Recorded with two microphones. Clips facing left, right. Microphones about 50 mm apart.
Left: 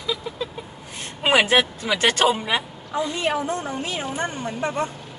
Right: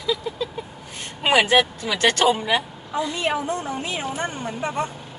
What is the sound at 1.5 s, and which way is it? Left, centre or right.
Speech, left.